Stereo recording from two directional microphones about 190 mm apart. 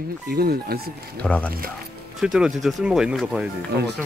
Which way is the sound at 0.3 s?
55° right (ahead or behind).